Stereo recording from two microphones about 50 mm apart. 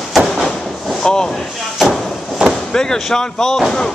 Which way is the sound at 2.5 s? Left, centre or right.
Centre.